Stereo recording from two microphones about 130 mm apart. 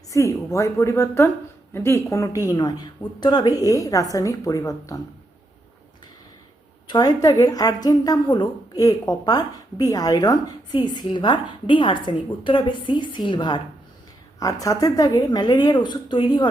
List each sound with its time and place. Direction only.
0.1 s a woman's voice: 25° left (ahead or behind)
6.8 s a woman's voice: 30° left (ahead or behind)